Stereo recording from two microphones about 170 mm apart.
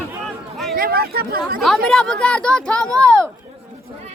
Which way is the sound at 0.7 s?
65° right (ahead or behind).